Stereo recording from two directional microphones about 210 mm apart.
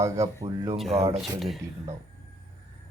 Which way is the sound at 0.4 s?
20° right (ahead or behind).